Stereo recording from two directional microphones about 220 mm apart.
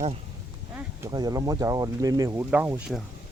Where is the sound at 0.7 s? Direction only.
15° right (ahead or behind).